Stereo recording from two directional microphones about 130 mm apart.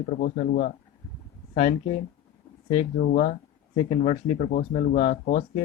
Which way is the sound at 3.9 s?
55° left (ahead or behind).